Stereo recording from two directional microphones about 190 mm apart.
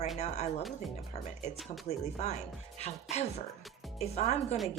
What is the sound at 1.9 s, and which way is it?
Speech, 35° left (ahead or behind).